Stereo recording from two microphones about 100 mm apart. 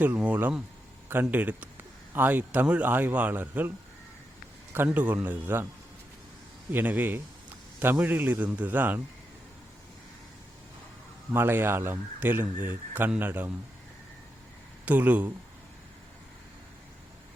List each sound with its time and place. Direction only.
0.0 s speech: 15° right (ahead or behind)
4.9 s speech: 15° right (ahead or behind)
6.7 s speech: 20° right (ahead or behind)
11.3 s speech: 20° right (ahead or behind)
14.8 s speech: 15° right (ahead or behind)